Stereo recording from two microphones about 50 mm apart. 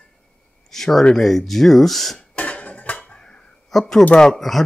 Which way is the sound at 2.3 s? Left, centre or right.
Left.